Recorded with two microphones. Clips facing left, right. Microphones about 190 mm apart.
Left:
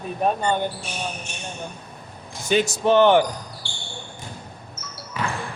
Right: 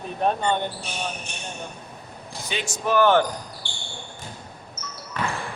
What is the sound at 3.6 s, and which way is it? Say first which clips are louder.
Basketball bounce: even; 15° right (ahead or behind).